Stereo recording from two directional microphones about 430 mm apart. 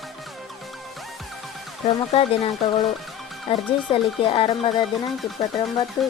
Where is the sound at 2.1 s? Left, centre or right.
Centre.